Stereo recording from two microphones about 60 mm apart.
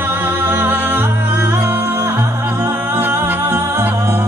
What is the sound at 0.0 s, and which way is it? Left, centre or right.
Music, right.